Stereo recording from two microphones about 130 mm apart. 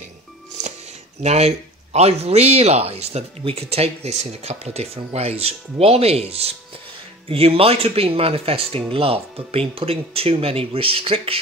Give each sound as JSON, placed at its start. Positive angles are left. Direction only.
{"t": 1.2, "sound": "speech", "side_deg": -55}